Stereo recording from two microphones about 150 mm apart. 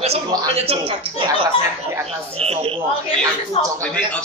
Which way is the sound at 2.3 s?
45° right (ahead or behind).